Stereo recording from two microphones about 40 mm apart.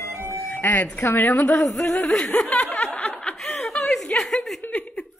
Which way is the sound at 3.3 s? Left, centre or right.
Centre.